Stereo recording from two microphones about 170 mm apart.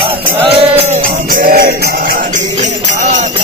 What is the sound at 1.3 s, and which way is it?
Music, 60° right (ahead or behind).